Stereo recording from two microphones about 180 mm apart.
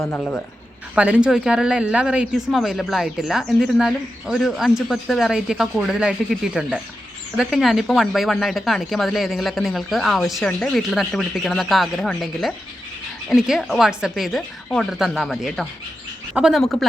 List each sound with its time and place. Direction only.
0.2 s speech: 5° left (ahead or behind)